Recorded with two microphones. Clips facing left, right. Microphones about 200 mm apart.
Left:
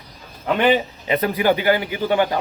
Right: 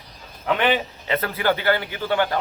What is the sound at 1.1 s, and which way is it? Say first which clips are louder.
Speech: left 4 dB; 15° left (ahead or behind).